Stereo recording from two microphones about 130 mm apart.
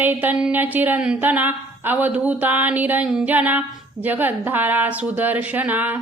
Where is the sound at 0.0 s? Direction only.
15° right (ahead or behind).